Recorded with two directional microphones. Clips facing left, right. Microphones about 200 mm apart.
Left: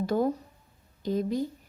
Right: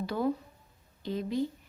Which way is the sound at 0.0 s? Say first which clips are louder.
Left 4 dB; 45° left (ahead or behind).